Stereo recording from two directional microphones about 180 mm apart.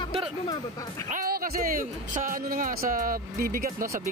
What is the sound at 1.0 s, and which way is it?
Speech, 50° right (ahead or behind).